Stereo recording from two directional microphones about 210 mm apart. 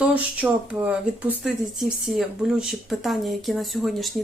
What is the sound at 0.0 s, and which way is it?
Speech, 5° right (ahead or behind).